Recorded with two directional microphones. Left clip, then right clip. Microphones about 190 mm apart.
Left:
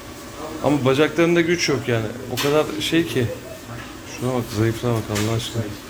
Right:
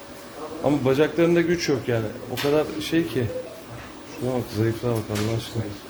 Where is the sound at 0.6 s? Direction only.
15° right (ahead or behind).